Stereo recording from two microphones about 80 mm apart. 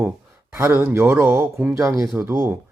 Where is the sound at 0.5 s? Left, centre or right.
Right.